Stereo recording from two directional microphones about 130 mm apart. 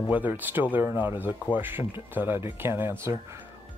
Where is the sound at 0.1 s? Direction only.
15° right (ahead or behind).